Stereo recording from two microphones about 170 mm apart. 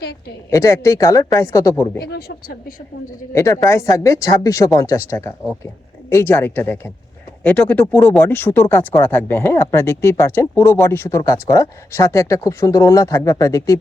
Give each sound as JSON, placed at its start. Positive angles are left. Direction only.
{"t": 0.5, "sound": "speech", "side_deg": 15}
{"t": 2.0, "sound": "speech", "side_deg": 65}
{"t": 3.3, "sound": "speech", "side_deg": 15}